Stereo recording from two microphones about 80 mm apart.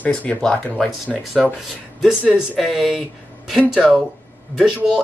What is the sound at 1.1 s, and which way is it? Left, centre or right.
Speech, centre.